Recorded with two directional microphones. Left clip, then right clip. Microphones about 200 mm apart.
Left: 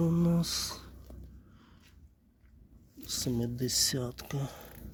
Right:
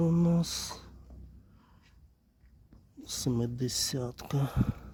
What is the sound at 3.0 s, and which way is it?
Speech, 20° right (ahead or behind).